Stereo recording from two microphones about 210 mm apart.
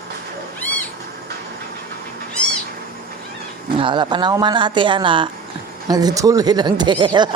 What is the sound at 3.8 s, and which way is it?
Speech, 20° right (ahead or behind).